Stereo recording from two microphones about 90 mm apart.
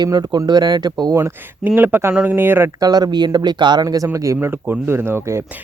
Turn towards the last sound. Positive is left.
turn(degrees=-30)  # may be behind; listen again after turning